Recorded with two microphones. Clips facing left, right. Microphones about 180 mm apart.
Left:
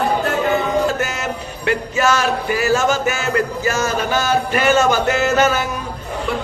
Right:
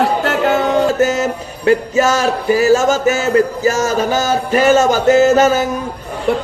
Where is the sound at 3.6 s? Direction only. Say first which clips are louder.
Right 5 dB; 40° right (ahead or behind).